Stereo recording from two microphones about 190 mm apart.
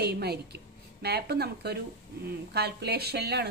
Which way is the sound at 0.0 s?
55° right (ahead or behind).